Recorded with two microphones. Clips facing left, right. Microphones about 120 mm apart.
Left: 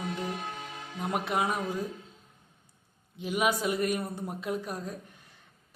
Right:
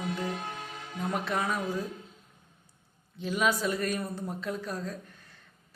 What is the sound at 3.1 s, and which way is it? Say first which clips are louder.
Mantra: even; 15° left (ahead or behind).